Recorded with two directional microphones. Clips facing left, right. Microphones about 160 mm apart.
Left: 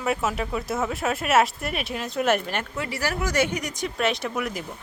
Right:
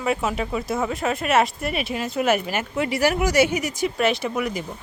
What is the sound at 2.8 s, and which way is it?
Speech, 15° right (ahead or behind).